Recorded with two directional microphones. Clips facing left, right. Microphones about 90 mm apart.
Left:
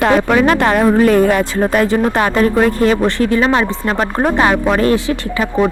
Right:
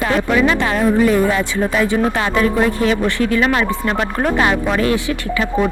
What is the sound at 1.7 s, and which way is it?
Speech, 40° left (ahead or behind).